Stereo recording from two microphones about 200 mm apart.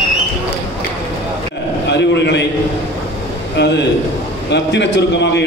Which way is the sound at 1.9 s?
60° left (ahead or behind).